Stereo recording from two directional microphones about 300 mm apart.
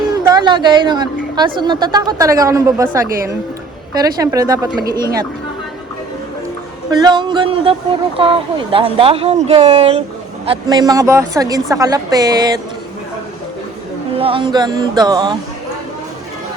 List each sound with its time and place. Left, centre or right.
0.3 s a woman's voice: centre
3.9 s a woman's voice: centre
6.9 s a woman's voice: centre
14.2 s a woman's voice: centre